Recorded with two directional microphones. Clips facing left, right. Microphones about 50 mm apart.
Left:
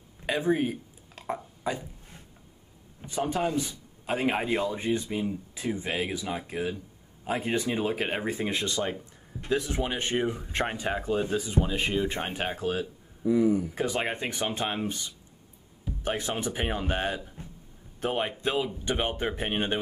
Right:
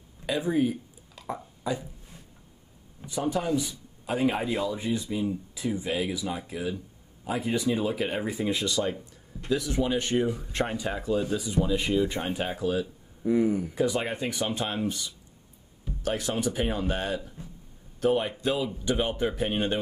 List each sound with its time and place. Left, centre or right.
0.3 s a sound: left
3.1 s a man's voice: left
13.2 s speech: right
13.7 s speech: left